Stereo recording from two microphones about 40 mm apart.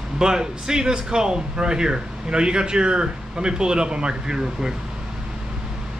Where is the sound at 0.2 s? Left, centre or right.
Centre.